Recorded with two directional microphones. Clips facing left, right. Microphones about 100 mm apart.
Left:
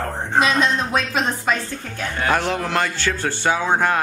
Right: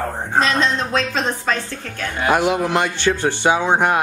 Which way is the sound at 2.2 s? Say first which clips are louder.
Right 4 dB; 10° right (ahead or behind).